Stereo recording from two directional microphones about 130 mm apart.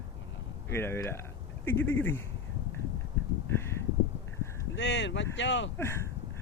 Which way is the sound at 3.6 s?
20° left (ahead or behind).